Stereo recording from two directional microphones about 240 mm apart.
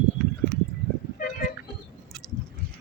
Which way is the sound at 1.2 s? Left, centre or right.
Left.